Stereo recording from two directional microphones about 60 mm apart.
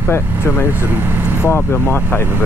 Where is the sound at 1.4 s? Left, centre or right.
Left.